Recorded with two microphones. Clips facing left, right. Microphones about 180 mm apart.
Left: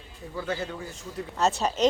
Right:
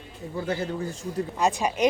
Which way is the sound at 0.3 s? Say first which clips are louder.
Right 3 dB; 30° right (ahead or behind).